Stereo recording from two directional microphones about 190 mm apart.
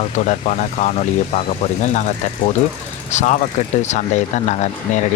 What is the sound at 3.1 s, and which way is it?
Speech, 40° left (ahead or behind).